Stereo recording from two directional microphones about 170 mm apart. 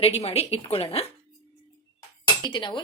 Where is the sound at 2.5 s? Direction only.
25° left (ahead or behind).